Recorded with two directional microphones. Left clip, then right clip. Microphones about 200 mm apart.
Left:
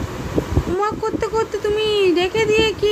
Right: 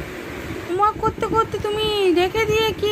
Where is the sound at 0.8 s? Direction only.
15° left (ahead or behind).